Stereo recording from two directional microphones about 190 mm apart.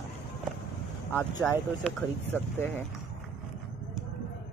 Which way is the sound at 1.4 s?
5° left (ahead or behind).